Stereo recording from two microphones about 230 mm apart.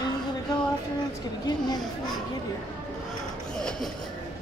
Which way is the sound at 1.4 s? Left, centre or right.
Centre.